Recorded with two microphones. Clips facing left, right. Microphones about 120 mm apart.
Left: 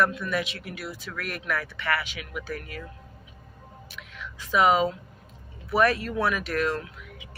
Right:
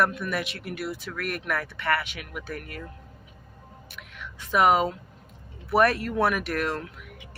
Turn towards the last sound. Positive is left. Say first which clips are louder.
# left 1 dB
turn(degrees=-55)  # may be behind; listen again after turning